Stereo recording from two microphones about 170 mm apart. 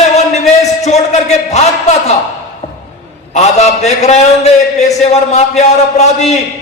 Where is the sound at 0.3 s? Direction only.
40° left (ahead or behind).